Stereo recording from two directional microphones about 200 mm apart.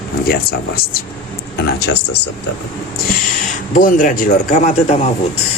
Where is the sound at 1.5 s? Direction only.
55° left (ahead or behind).